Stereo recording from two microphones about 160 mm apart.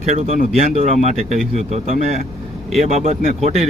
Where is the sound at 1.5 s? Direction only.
45° right (ahead or behind).